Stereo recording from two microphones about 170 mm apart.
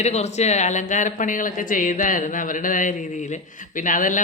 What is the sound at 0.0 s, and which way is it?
Speech, 40° left (ahead or behind).